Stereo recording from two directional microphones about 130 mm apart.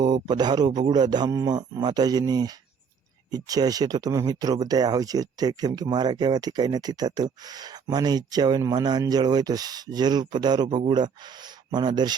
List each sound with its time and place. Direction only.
0.0 s speech: 35° right (ahead or behind)